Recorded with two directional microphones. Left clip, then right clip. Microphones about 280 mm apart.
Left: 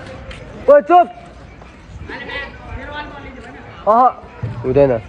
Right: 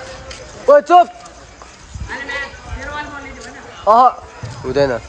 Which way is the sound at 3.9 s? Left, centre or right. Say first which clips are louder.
Right 2 dB; centre.